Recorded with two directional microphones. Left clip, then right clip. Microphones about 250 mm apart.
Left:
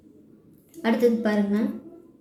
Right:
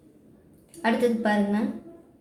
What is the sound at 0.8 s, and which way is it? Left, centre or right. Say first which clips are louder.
Speech: left 1 dB; centre.